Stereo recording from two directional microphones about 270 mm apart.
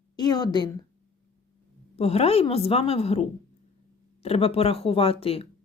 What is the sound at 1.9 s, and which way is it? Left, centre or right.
A woman's voice, left.